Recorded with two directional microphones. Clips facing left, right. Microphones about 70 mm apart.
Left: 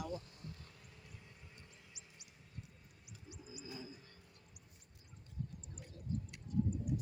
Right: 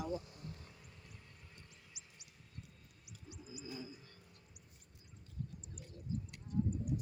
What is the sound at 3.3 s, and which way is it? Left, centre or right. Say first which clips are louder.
Bird: right 2 dB; left.